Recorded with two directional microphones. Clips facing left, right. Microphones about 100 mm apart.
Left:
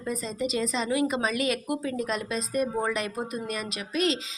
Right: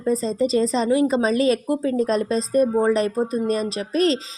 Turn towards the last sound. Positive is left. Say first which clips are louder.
# right 7 dB
turn(degrees=-40)  # may be behind; listen again after turning